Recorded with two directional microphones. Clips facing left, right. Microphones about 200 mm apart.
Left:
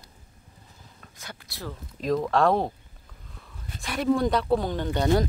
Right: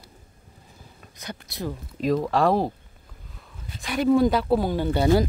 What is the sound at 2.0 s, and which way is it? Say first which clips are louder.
Speech: right 1 dB; 5° right (ahead or behind).